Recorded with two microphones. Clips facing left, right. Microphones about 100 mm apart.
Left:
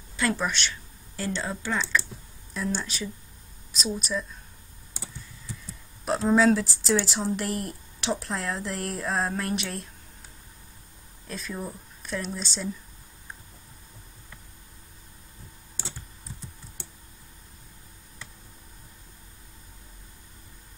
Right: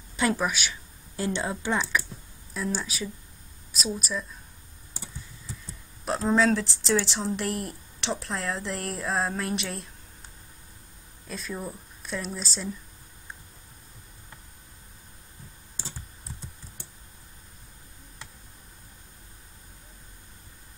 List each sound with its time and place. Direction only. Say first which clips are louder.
0.1 s speech: right 1 dB; 15° right (ahead or behind)
2.5 s speech: even; centre (ahead or behind)
6.0 s speech: left 2 dB; centre (ahead or behind)
11.2 s speech: even; centre (ahead or behind)